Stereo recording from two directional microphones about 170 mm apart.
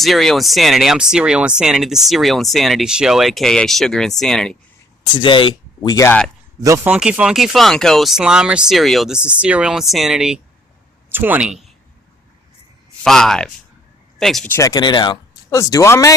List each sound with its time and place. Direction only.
0.0 s speech: centre (ahead or behind)
5.1 s speech: 30° left (ahead or behind)
6.6 s speech: 15° right (ahead or behind)
6.9 s speech: 5° right (ahead or behind)
13.1 s speech: centre (ahead or behind)
14.5 s speech: 20° left (ahead or behind)